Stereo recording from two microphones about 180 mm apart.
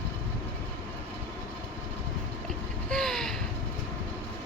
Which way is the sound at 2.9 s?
5° left (ahead or behind).